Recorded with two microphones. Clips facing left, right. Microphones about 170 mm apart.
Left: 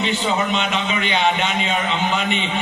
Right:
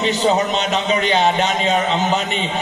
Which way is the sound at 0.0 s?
40° right (ahead or behind).